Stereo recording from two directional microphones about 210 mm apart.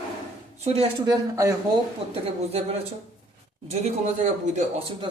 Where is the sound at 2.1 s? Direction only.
30° right (ahead or behind).